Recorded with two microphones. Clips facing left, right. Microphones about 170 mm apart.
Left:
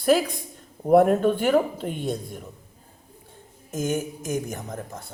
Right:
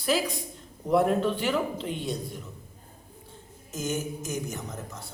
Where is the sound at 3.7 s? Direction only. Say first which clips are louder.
Left 4 dB; 55° left (ahead or behind).